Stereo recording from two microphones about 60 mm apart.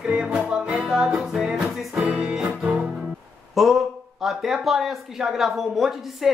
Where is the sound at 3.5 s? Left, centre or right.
Centre.